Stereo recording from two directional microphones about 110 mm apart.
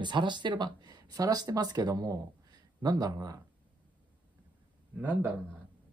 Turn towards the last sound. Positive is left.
turn(degrees=-15)  # may be behind; listen again after turning